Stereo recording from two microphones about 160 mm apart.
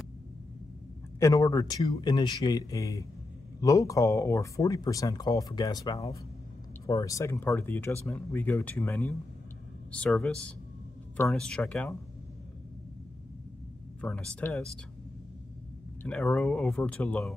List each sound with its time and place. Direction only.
1.2 s speech: 20° left (ahead or behind); by 12.0 s 5° left (ahead or behind)
14.0 s speech: 5° left (ahead or behind)
16.0 s speech: 5° left (ahead or behind)